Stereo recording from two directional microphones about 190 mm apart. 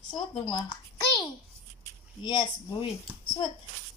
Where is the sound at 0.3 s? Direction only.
25° left (ahead or behind).